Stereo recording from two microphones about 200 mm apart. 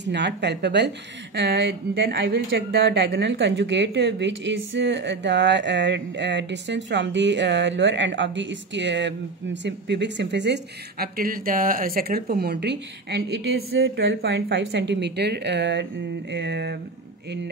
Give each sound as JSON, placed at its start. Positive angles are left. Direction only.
{"t": 0.1, "sound": "a woman's voice", "side_deg": -60}
{"t": 13.7, "sound": "a woman's voice", "side_deg": -75}